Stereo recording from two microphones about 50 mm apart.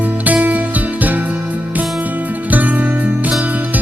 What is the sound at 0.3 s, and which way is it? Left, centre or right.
Music, right.